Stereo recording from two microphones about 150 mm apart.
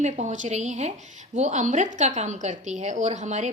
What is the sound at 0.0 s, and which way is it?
A woman's voice, 55° right (ahead or behind).